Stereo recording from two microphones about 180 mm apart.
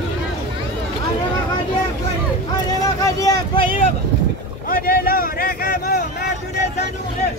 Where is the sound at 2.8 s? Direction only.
20° left (ahead or behind).